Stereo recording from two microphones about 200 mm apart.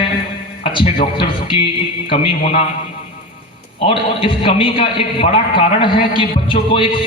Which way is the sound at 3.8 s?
25° left (ahead or behind).